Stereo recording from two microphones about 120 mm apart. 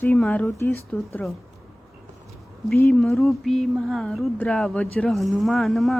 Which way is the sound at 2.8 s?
15° left (ahead or behind).